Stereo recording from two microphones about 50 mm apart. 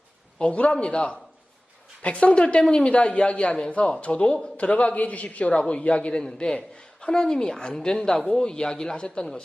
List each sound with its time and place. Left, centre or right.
0.3 s a man's voice: left